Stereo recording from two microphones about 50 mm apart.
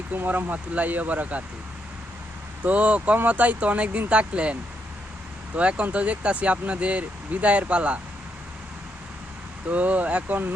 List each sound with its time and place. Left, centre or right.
0.3 s speech: right
2.6 s speech: right
5.5 s speech: right
9.6 s speech: right